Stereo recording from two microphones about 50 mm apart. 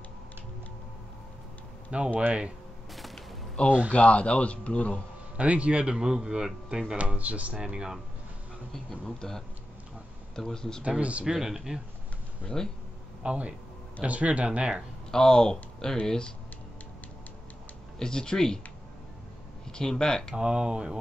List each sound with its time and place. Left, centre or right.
2.1 s speech: right
3.6 s speech: left
5.4 s speech: right
7.0 s speech: right
7.6 s speech: centre
9.0 s speech: centre
10.8 s speech: right
11.2 s speech: centre
12.6 s speech: centre
13.2 s speech: right
15.0 s speech: centre
17.9 s speech: centre
19.7 s speech: centre
20.3 s speech: centre